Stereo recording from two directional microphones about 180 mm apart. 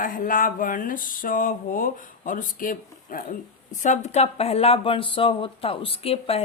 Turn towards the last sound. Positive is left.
turn(degrees=35)  # may be behind; listen again after turning